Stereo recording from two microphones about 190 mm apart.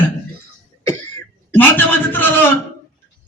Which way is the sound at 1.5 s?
10° left (ahead or behind).